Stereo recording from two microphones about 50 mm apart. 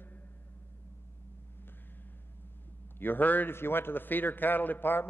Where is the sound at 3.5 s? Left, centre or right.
Left.